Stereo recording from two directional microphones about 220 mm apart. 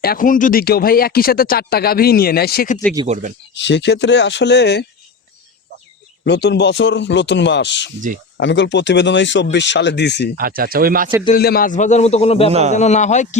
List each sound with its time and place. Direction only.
0.0 s speech: 40° left (ahead or behind)
3.1 s speech: 35° right (ahead or behind)
3.5 s speech: 55° left (ahead or behind)
6.2 s speech: 50° left (ahead or behind)
10.3 s speech: 40° right (ahead or behind)
11.3 s a man's voice: 45° left (ahead or behind); by 12.5 s 30° left (ahead or behind)
12.5 s a man's voice: 30° right (ahead or behind)
12.7 s a man's voice: 30° left (ahead or behind)